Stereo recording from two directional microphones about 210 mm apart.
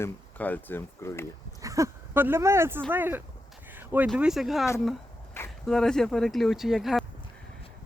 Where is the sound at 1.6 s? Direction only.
15° right (ahead or behind).